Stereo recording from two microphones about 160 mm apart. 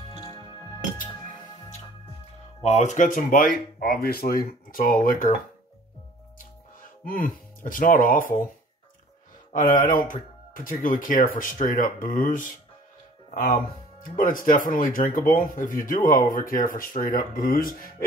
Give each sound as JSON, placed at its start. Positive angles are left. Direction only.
{"t": 0.1, "sound": "music", "side_deg": 30}
{"t": 2.6, "sound": "speech", "side_deg": 45}
{"t": 6.3, "sound": "music", "side_deg": 60}
{"t": 9.6, "sound": "speech", "side_deg": 60}
{"t": 14.1, "sound": "speech", "side_deg": 60}